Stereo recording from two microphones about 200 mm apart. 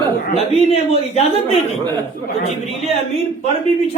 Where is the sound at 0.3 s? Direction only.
30° left (ahead or behind).